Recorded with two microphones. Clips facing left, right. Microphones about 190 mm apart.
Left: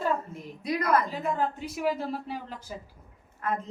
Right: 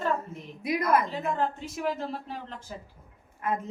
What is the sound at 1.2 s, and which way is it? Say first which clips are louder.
Speech: even; 5° left (ahead or behind).